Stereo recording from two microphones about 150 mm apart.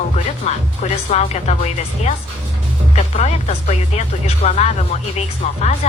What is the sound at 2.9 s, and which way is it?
Speech, 45° left (ahead or behind).